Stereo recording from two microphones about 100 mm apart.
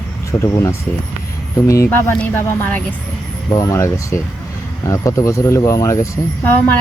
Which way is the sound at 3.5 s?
35° left (ahead or behind).